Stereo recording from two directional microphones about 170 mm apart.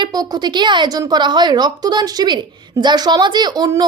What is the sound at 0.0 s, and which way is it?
A woman's voice, 25° right (ahead or behind).